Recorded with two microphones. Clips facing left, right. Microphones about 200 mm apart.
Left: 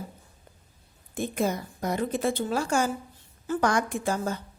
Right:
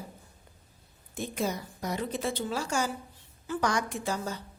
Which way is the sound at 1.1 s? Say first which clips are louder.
Left 4 dB; 55° left (ahead or behind).